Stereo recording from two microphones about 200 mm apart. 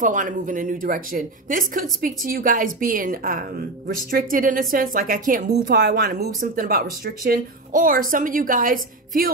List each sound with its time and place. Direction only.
0.0 s speech: 40° right (ahead or behind)
5.7 s speech: 60° right (ahead or behind)